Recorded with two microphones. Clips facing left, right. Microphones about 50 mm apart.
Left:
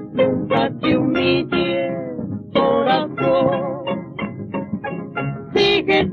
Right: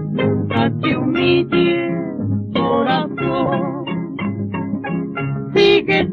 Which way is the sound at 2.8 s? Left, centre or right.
Centre.